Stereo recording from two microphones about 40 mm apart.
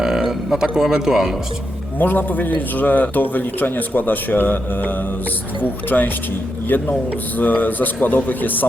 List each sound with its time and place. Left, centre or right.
0.0 s a sound: centre
0.8 s a man's voice: centre
2.0 s a man's voice: left